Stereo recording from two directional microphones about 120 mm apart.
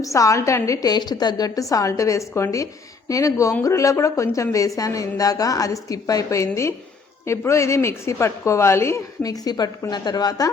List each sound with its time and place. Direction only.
0.0 s a woman's voice: 25° left (ahead or behind)